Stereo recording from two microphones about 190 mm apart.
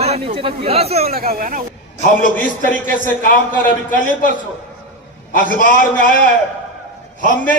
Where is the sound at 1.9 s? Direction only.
45° left (ahead or behind).